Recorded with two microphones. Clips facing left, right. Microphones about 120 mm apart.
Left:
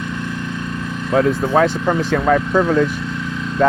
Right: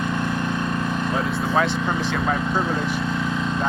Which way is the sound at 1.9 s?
55° left (ahead or behind).